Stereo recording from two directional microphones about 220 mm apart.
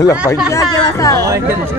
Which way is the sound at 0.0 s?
15° left (ahead or behind).